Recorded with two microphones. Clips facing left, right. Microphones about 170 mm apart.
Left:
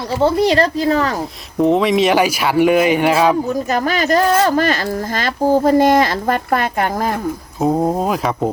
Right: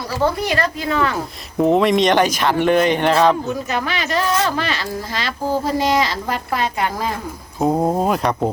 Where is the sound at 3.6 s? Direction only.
40° left (ahead or behind).